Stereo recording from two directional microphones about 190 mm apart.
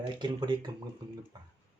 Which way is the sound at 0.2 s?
25° right (ahead or behind).